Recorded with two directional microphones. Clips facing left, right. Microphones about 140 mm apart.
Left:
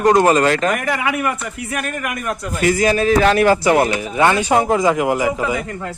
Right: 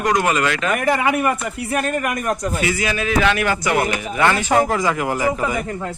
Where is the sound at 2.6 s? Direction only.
40° left (ahead or behind); by 5.2 s 15° left (ahead or behind).